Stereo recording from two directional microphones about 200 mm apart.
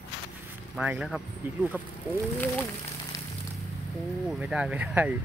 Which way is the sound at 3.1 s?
15° left (ahead or behind).